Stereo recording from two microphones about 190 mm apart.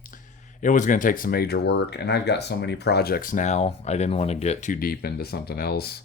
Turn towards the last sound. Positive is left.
turn(degrees=55)  # may be behind; listen again after turning